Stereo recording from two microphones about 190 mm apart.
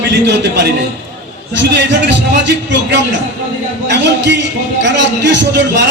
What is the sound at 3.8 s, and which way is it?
A man's voice, 65° right (ahead or behind).